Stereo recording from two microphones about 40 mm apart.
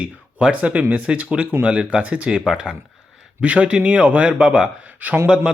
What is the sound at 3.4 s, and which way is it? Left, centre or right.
Speech, right.